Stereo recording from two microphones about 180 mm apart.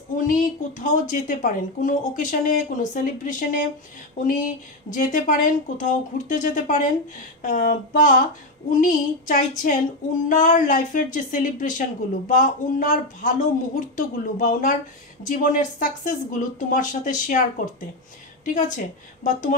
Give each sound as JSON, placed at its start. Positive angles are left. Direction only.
{"t": 0.1, "sound": "speech", "side_deg": 45}
{"t": 18.4, "sound": "speech", "side_deg": 45}